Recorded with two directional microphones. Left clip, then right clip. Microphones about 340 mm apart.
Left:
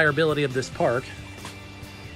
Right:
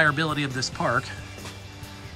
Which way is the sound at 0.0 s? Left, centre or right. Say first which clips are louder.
Left 2 dB; centre.